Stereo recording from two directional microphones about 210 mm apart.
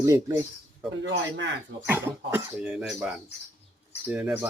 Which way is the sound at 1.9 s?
10° right (ahead or behind).